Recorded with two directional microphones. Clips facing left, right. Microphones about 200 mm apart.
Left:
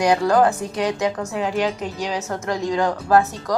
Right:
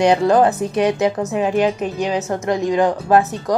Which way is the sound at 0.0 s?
25° right (ahead or behind).